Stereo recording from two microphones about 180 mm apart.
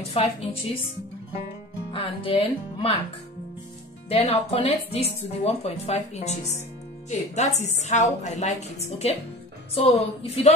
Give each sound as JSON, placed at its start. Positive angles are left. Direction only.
{"t": 0.1, "sound": "speech", "side_deg": 35}
{"t": 1.9, "sound": "speech", "side_deg": 30}
{"t": 4.1, "sound": "speech", "side_deg": 35}